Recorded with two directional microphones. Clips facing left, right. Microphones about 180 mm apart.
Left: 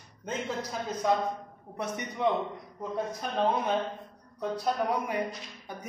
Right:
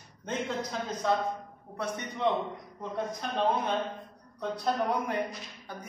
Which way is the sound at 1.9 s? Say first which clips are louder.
Left 1 dB; 15° left (ahead or behind).